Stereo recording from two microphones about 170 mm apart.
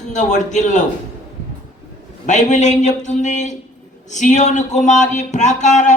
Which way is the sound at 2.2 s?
45° left (ahead or behind).